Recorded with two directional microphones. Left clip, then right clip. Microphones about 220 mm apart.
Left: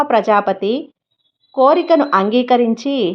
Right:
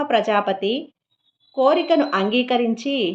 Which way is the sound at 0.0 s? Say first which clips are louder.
Left 5 dB; 25° left (ahead or behind).